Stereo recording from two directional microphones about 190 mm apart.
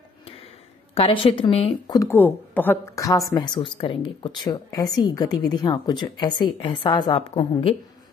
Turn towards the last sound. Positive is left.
turn(degrees=20)  # may be behind; listen again after turning